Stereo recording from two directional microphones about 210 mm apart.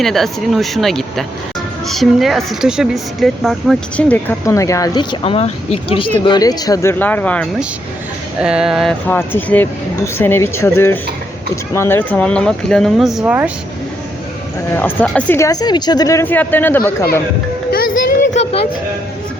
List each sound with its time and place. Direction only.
0.0 s a woman's voice: centre (ahead or behind)
8.4 s a woman's voice: 5° right (ahead or behind)
14.8 s speech: 10° left (ahead or behind)